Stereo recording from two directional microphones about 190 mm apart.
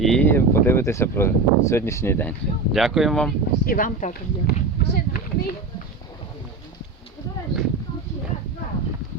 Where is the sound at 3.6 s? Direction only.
45° left (ahead or behind).